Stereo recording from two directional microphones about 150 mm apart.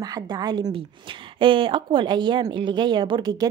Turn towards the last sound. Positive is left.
turn(degrees=-30)  # may be behind; listen again after turning